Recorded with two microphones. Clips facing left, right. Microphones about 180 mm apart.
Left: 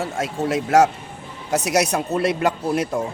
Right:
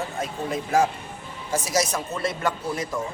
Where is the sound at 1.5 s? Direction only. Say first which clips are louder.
Left 5 dB; 65° left (ahead or behind).